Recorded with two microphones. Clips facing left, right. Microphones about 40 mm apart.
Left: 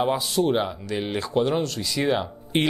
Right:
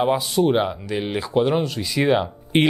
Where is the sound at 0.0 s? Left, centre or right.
Centre.